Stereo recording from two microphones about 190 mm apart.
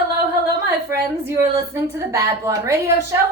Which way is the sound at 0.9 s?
15° right (ahead or behind).